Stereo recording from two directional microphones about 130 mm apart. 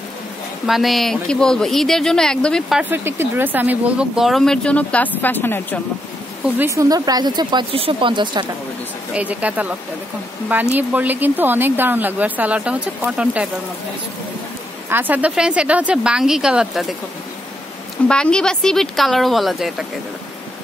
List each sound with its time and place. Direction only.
0.7 s speech: centre (ahead or behind)
2.8 s speech: 15° right (ahead or behind); by 5.8 s 15° left (ahead or behind)
6.6 s speech: 25° right (ahead or behind)
9.1 s a woman's voice: 10° right (ahead or behind)
14.9 s a woman's voice: 15° right (ahead or behind)
18.0 s speech: 5° left (ahead or behind)